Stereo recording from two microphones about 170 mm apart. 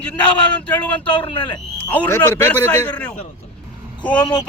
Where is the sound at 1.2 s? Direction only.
30° left (ahead or behind).